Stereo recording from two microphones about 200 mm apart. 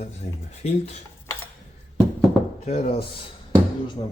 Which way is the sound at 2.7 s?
30° left (ahead or behind).